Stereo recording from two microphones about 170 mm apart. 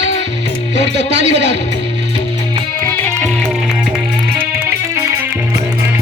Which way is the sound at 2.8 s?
15° left (ahead or behind).